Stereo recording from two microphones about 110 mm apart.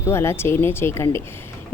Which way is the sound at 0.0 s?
25° left (ahead or behind).